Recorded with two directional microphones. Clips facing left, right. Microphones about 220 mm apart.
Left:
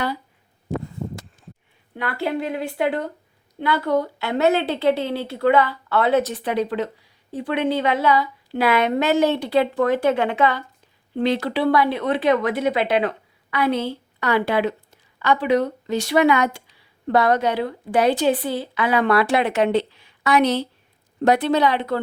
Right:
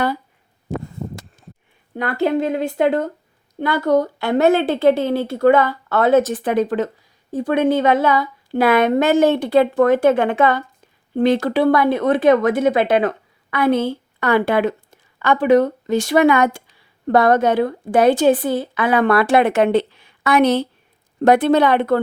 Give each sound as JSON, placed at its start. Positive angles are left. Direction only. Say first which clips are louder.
{"t": 2.0, "sound": "a woman's voice", "louder": "right 6 dB", "side_deg": -45}